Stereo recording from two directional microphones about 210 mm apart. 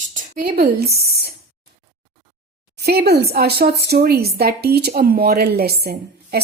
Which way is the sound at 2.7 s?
50° right (ahead or behind).